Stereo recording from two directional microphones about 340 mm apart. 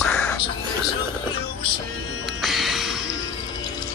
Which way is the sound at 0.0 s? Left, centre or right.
Centre.